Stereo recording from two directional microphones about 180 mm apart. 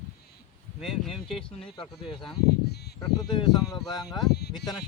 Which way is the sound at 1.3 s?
30° left (ahead or behind).